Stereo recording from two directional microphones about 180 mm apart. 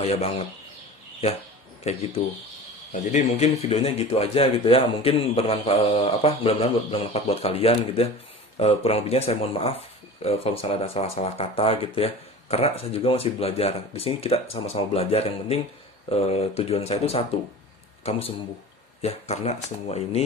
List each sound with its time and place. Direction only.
0.0 s a man's voice: 35° left (ahead or behind)
1.9 s a man's voice: 35° left (ahead or behind)
18.9 s a man's voice: 35° left (ahead or behind)